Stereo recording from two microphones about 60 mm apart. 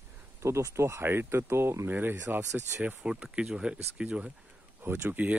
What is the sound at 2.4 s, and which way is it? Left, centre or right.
Speech, right.